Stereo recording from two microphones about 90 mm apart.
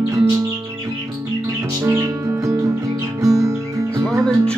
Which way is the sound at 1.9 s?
35° right (ahead or behind).